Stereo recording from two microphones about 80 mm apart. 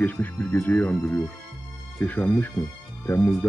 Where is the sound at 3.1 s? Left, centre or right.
Left.